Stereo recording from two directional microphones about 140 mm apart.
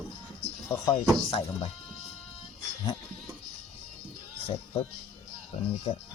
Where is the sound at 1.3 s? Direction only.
40° left (ahead or behind).